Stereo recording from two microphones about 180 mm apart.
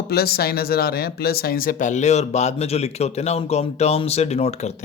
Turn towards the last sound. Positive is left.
turn(degrees=35)  # may be behind; listen again after turning